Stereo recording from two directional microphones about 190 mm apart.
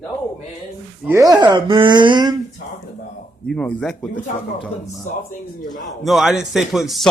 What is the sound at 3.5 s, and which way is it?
Speech, 5° left (ahead or behind).